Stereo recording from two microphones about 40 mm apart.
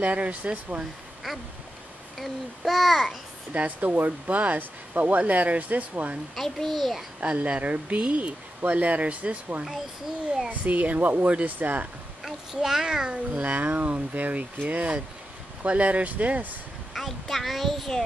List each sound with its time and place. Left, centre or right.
0.0 s speech: right
2.1 s babbling: centre
3.5 s speech: right
6.3 s babbling: centre
7.4 s speech: right
12.5 s a child's voice: centre
13.1 s speech: right
16.9 s a child's voice: centre